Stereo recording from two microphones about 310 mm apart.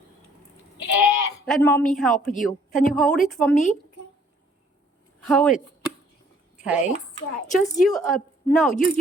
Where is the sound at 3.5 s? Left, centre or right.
Left.